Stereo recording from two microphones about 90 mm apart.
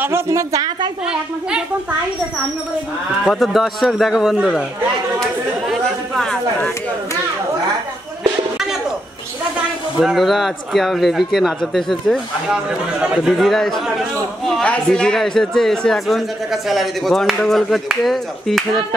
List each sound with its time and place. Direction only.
0.0 s a woman's voice: 30° right (ahead or behind)
1.0 s a woman's voice: 10° right (ahead or behind)
3.3 s speech: centre (ahead or behind)
5.7 s chatter: 5° left (ahead or behind)
9.9 s speech: 5° right (ahead or behind)